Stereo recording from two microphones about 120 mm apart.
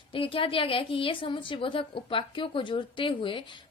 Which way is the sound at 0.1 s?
50° left (ahead or behind).